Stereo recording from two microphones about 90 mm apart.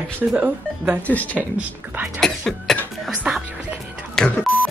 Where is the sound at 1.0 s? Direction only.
15° left (ahead or behind).